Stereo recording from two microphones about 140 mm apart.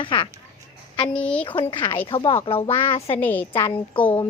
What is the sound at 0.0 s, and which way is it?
Speech, 40° left (ahead or behind).